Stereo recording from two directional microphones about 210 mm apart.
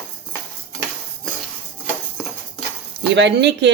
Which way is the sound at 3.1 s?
55° right (ahead or behind).